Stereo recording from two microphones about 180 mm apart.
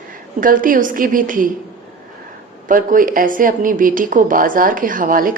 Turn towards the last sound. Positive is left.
turn(degrees=-50)  # may be behind; listen again after turning